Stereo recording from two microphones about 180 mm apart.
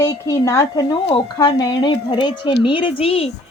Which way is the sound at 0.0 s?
15° left (ahead or behind).